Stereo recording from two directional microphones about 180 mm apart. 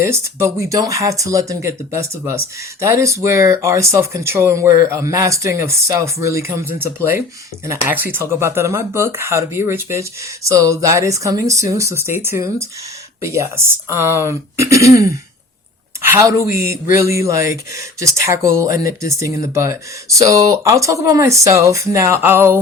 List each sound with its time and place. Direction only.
0.1 s speech: 15° right (ahead or behind)
16.0 s speech: 15° right (ahead or behind)